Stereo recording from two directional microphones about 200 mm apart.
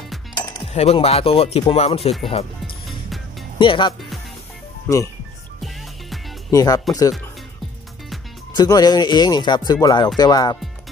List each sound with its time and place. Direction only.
0.7 s speech: 30° left (ahead or behind)
3.5 s speech: 25° left (ahead or behind)
6.5 s speech: 20° left (ahead or behind)
8.5 s speech: 20° left (ahead or behind)